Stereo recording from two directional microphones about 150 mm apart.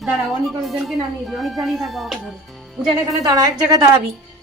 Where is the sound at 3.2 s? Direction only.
25° right (ahead or behind).